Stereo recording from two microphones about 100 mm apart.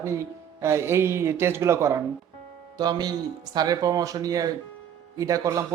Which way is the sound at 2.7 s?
45° right (ahead or behind).